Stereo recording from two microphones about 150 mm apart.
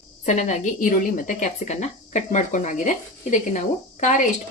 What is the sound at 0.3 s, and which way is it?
Speech, 50° left (ahead or behind).